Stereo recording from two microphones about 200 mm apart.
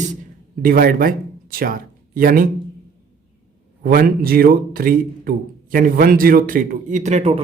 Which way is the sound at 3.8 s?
45° right (ahead or behind).